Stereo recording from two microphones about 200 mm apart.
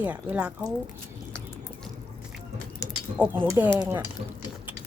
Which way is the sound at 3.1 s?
10° right (ahead or behind).